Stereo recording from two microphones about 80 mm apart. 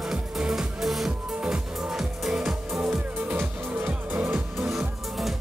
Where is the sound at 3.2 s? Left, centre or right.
Right.